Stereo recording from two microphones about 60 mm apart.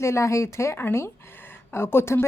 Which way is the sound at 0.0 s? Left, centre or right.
Left.